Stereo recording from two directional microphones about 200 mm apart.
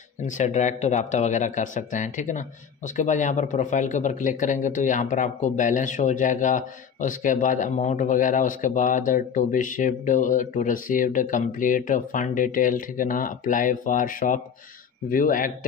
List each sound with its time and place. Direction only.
0.2 s a man's voice: 35° left (ahead or behind)